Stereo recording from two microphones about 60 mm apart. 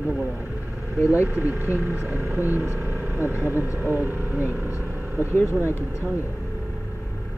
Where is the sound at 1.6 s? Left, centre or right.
Right.